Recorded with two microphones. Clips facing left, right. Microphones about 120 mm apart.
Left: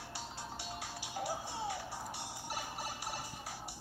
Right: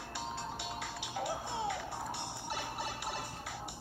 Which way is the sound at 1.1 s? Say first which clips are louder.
Right 2 dB; 60° right (ahead or behind).